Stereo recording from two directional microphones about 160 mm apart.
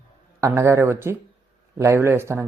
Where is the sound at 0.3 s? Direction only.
20° right (ahead or behind).